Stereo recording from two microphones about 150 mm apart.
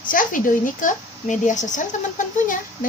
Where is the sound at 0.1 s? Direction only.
65° left (ahead or behind).